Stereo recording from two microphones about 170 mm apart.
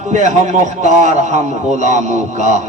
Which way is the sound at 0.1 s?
45° right (ahead or behind).